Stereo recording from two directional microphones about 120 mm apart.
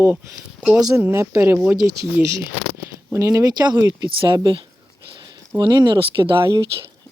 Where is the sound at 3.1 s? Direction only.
30° right (ahead or behind); by 6.5 s 45° right (ahead or behind).